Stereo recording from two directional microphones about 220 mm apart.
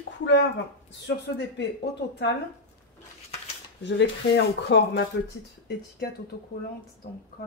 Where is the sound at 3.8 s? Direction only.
50° left (ahead or behind).